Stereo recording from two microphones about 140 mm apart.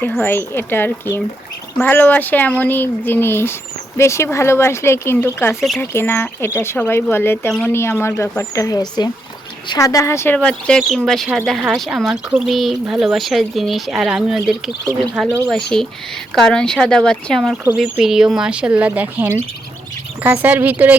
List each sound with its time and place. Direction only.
0.2 s speech: 15° left (ahead or behind)
5.5 s speech: centre (ahead or behind)
5.8 s speech: 15° left (ahead or behind)
10.3 s speech: 5° left (ahead or behind); by 20.9 s 10° right (ahead or behind)